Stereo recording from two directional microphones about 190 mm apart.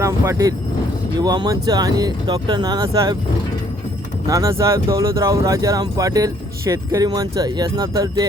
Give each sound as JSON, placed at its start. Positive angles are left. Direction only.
{"t": 0.0, "sound": "speech", "side_deg": -15}
{"t": 4.3, "sound": "speech", "side_deg": -15}